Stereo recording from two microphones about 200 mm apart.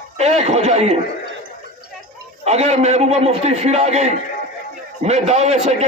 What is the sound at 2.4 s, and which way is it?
A man's voice, 35° right (ahead or behind).